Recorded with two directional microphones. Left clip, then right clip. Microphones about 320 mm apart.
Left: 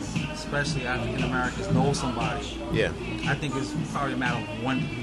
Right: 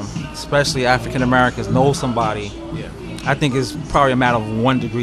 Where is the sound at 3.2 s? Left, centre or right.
Right.